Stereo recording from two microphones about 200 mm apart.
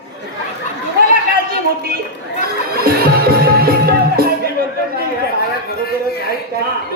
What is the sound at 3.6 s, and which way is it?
Music, 50° right (ahead or behind).